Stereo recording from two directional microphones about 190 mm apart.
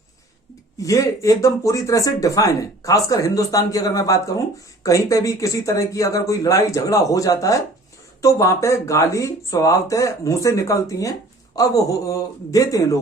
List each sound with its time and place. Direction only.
0.8 s speech: 15° left (ahead or behind)